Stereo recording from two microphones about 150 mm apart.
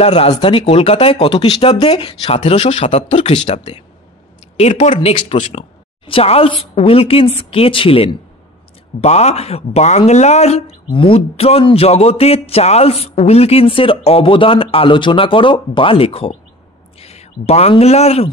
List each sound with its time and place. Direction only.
0.0 s speech: 40° left (ahead or behind)